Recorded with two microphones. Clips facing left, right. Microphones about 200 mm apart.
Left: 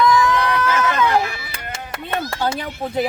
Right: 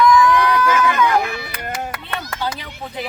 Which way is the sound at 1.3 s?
55° right (ahead or behind).